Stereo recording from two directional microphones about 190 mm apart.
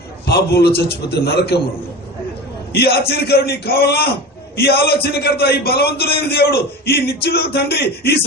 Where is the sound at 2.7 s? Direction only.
55° left (ahead or behind).